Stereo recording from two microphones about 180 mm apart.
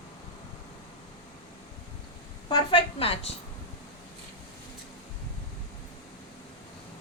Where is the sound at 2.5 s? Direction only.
25° left (ahead or behind).